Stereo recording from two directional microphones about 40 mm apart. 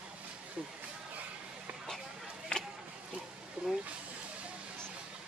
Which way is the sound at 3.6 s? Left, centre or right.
Right.